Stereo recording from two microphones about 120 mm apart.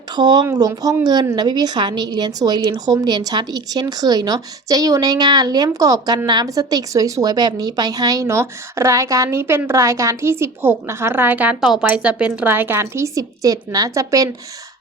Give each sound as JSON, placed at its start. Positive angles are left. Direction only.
{"t": 0.1, "sound": "a woman's voice", "side_deg": -35}